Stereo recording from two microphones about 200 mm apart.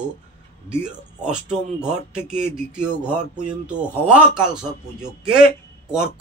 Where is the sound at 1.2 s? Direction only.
5° right (ahead or behind).